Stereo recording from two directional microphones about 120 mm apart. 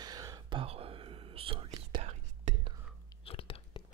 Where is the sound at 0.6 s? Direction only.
50° right (ahead or behind).